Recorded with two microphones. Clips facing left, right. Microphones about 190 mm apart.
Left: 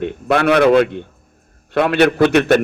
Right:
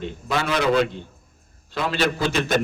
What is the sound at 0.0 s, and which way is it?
A man's voice, 60° left (ahead or behind).